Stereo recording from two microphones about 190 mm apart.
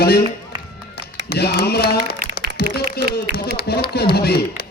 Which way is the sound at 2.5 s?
55° left (ahead or behind).